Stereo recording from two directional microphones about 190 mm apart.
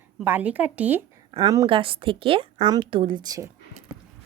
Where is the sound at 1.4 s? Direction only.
20° right (ahead or behind).